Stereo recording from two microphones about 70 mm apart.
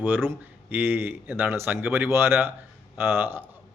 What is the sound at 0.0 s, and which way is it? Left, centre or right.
A man's voice, right.